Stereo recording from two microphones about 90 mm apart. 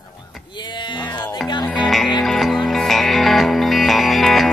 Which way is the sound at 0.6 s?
55° left (ahead or behind).